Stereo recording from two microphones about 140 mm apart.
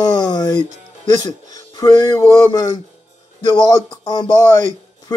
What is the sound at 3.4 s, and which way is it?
Speech, 30° left (ahead or behind).